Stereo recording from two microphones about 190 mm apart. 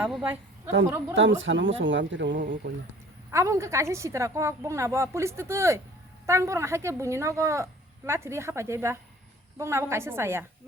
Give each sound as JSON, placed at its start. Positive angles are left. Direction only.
{"t": 0.0, "sound": "a woman's voice", "side_deg": -5}
{"t": 1.1, "sound": "speech", "side_deg": -90}
{"t": 2.3, "sound": "speech", "side_deg": -45}
{"t": 3.3, "sound": "a woman's voice", "side_deg": -15}